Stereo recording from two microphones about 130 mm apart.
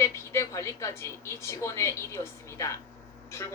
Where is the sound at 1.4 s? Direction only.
20° left (ahead or behind).